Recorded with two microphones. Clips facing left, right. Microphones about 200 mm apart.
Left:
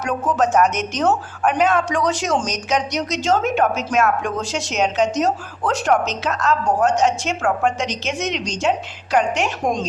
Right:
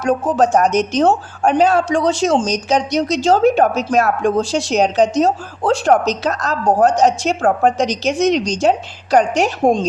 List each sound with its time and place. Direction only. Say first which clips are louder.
0.0 s speech: right 5 dB; 30° right (ahead or behind)